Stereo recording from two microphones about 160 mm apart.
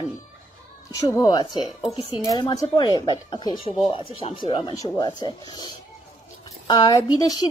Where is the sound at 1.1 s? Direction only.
25° left (ahead or behind).